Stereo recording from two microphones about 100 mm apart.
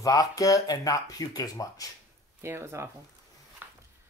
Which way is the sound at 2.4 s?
25° right (ahead or behind).